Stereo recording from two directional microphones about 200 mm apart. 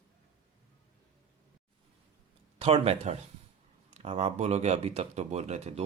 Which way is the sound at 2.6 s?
30° right (ahead or behind).